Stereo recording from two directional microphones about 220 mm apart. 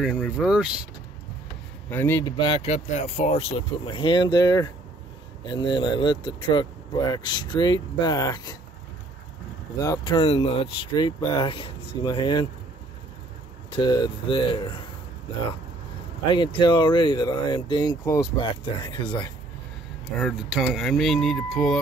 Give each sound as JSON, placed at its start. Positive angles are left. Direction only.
{"t": 0.0, "sound": "speech", "side_deg": 0}
{"t": 1.9, "sound": "a man's voice", "side_deg": 10}
{"t": 2.3, "sound": "speech", "side_deg": 25}
{"t": 9.8, "sound": "speech", "side_deg": 15}
{"t": 13.7, "sound": "speech", "side_deg": 20}
{"t": 16.3, "sound": "speech", "side_deg": 20}
{"t": 20.2, "sound": "speech", "side_deg": 0}